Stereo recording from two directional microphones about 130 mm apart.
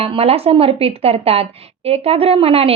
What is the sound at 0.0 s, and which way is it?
A woman's voice, 50° right (ahead or behind).